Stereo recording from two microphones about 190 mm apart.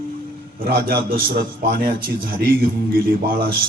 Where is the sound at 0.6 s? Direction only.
50° right (ahead or behind).